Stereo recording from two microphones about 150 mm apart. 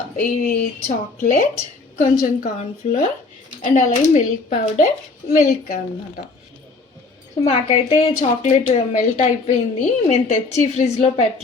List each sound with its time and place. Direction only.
0.2 s speech: 70° left (ahead or behind)
2.0 s a woman's voice: 50° left (ahead or behind)
3.8 s a woman's voice: 50° left (ahead or behind)
5.4 s speech: 70° left (ahead or behind)
7.4 s a woman's voice: 45° left (ahead or behind)